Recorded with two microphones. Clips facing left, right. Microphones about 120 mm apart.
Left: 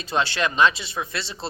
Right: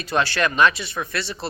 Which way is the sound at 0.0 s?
20° left (ahead or behind).